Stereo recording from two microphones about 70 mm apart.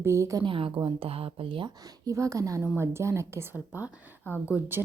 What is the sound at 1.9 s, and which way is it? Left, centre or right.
Speech, right.